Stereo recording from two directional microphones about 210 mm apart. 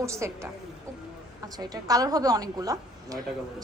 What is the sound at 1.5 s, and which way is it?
A woman's voice, 15° right (ahead or behind).